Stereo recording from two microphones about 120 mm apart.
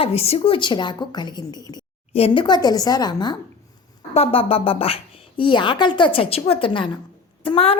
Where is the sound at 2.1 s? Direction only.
55° left (ahead or behind).